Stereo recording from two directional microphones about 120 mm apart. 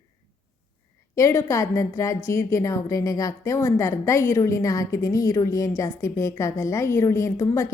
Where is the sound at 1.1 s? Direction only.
25° left (ahead or behind).